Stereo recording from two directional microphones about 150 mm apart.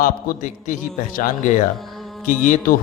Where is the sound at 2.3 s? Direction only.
60° left (ahead or behind).